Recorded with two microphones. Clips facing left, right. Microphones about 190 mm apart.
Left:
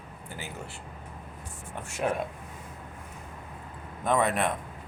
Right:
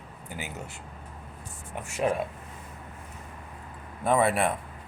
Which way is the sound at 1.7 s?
10° right (ahead or behind).